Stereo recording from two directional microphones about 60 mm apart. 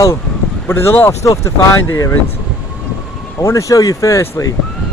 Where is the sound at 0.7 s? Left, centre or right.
Left.